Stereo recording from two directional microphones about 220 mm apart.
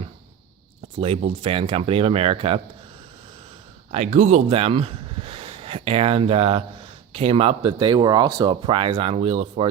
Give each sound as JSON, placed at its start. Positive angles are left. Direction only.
{"t": 0.9, "sound": "speech", "side_deg": -25}
{"t": 3.9, "sound": "speech", "side_deg": -30}